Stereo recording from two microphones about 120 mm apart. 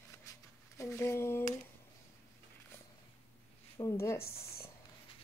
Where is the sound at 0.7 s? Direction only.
25° left (ahead or behind).